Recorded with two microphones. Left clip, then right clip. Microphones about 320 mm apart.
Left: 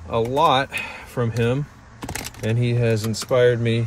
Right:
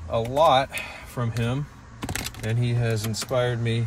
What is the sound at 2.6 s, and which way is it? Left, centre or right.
Speech, right.